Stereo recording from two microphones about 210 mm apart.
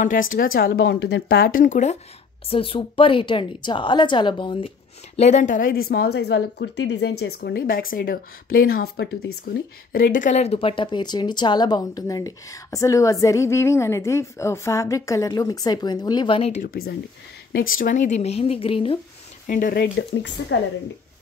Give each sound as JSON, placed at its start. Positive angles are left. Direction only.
{"t": 0.0, "sound": "a woman's voice", "side_deg": 40}
{"t": 9.9, "sound": "speech", "side_deg": 40}
{"t": 16.6, "sound": "a woman's voice", "side_deg": 45}
{"t": 19.4, "sound": "a woman's voice", "side_deg": 40}